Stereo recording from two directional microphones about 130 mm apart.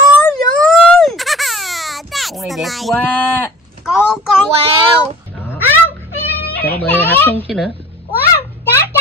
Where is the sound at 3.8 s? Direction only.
5° right (ahead or behind).